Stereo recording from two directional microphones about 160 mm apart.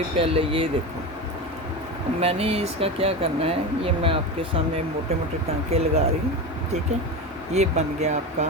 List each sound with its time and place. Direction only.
0.2 s speech: 35° right (ahead or behind)
2.2 s speech: 40° right (ahead or behind)
5.7 s speech: 40° right (ahead or behind)
7.5 s speech: 45° right (ahead or behind)